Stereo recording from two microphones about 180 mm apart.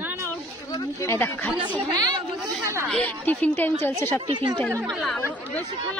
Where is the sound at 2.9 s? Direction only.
10° left (ahead or behind).